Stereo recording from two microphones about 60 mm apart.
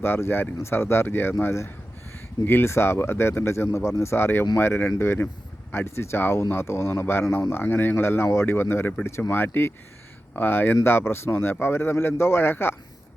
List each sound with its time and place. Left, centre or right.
0.0 s a man's voice: left